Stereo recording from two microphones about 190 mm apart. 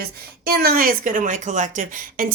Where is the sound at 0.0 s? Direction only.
55° right (ahead or behind).